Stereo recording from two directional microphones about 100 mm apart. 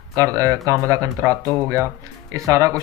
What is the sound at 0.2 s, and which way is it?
Speech, 35° right (ahead or behind).